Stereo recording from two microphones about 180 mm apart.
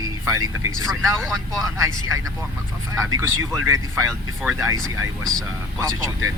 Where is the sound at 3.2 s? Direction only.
15° right (ahead or behind).